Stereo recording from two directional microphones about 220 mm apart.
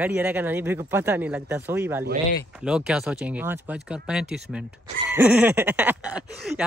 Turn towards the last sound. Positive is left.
turn(degrees=-5)  # may be behind; listen again after turning